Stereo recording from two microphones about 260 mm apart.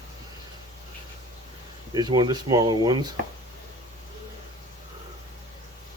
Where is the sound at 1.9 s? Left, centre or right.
Centre.